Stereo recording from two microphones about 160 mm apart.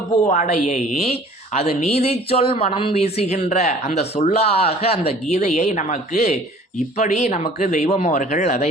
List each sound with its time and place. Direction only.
0.3 s a woman's voice: 50° left (ahead or behind)